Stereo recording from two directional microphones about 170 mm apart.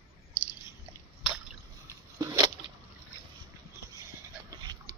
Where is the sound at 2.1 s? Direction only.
20° right (ahead or behind).